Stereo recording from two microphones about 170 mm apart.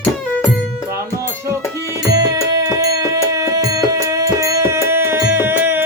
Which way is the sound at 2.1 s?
20° right (ahead or behind).